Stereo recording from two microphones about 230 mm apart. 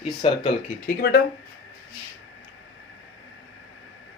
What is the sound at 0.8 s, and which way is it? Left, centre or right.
Speech, left.